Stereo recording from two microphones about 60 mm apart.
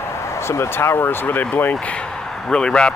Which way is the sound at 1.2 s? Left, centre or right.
Left.